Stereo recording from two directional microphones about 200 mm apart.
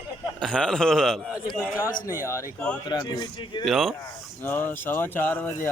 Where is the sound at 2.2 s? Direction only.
15° left (ahead or behind).